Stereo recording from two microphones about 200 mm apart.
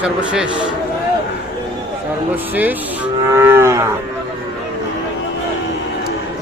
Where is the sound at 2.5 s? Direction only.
10° right (ahead or behind).